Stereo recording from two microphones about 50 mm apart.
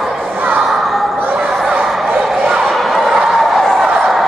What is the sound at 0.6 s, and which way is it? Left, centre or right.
Crowd, centre.